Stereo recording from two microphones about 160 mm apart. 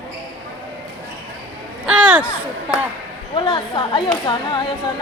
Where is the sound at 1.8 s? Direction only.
5° right (ahead or behind).